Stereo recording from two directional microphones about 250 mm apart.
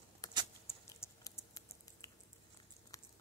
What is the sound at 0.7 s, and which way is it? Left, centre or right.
Typing, centre.